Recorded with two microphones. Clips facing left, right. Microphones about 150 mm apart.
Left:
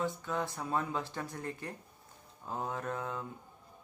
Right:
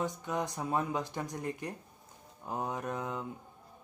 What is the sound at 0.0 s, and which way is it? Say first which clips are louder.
Speech: right 1 dB; 15° right (ahead or behind).